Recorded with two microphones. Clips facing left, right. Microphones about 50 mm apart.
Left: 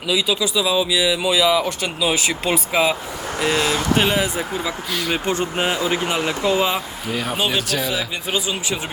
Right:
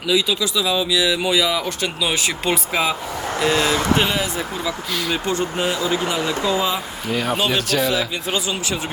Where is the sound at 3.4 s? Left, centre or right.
Left.